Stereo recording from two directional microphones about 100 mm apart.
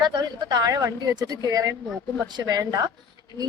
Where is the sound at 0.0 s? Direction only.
45° right (ahead or behind).